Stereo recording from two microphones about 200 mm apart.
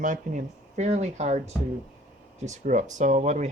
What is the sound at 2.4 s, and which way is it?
Speech, 35° right (ahead or behind).